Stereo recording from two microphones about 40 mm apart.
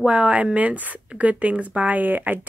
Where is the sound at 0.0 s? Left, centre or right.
Right.